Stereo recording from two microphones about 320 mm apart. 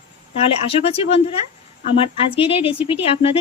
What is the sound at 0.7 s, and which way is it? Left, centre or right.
Speech, centre.